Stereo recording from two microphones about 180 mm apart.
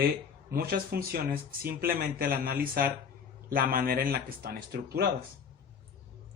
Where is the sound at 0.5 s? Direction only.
60° right (ahead or behind).